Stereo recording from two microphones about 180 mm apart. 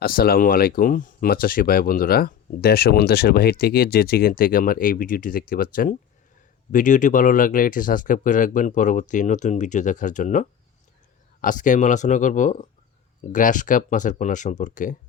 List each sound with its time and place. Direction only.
0.0 s speech: 55° left (ahead or behind)